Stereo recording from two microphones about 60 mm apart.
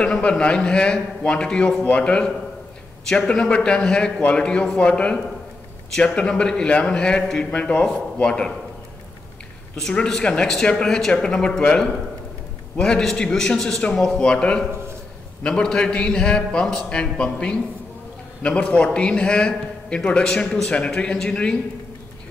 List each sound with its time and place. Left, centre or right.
0.0 s a man's voice: centre
9.8 s a man's voice: centre